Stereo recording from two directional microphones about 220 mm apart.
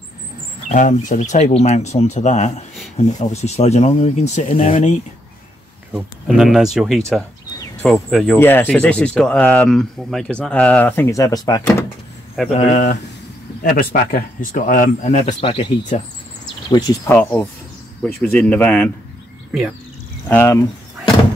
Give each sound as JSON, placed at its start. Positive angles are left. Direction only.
{"t": 0.7, "sound": "speech", "side_deg": 30}
{"t": 5.9, "sound": "speech", "side_deg": 0}
{"t": 12.5, "sound": "speech", "side_deg": 35}
{"t": 20.2, "sound": "speech", "side_deg": 10}